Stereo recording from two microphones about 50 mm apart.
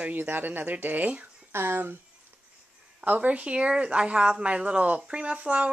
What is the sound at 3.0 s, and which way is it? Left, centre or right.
Speech, right.